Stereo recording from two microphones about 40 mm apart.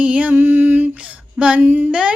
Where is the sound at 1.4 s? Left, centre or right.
Right.